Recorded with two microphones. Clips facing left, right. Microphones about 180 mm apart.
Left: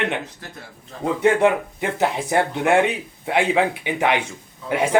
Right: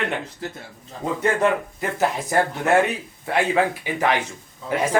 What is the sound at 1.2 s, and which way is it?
A man's voice, 20° left (ahead or behind).